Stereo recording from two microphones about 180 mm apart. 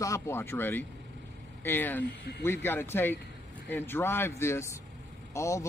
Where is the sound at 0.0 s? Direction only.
15° left (ahead or behind).